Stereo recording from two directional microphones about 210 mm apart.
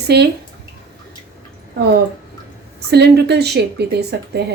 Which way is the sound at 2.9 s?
50° right (ahead or behind).